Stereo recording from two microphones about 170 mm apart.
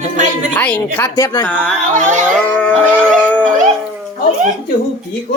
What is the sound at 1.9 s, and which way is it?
Speech, 45° right (ahead or behind).